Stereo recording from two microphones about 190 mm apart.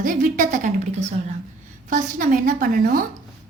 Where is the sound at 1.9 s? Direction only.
45° right (ahead or behind).